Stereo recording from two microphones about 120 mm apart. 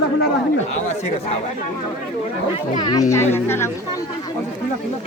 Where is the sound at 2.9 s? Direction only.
30° left (ahead or behind).